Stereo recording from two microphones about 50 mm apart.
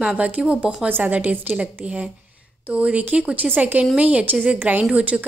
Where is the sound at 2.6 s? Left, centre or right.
Right.